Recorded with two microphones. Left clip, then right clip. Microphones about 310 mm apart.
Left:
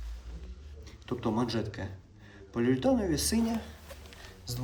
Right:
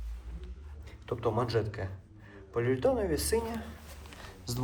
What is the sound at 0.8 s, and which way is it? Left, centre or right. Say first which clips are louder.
Speech: right 3 dB; centre.